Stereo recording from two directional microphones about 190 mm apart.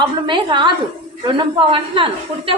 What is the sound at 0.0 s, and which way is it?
A woman's voice, 25° right (ahead or behind).